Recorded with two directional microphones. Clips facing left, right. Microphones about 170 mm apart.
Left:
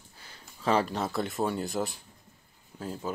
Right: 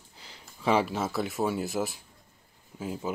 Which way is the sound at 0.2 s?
15° right (ahead or behind).